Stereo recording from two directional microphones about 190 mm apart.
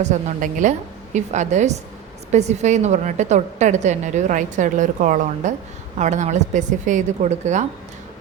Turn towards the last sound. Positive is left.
turn(degrees=-40)  # may be behind; listen again after turning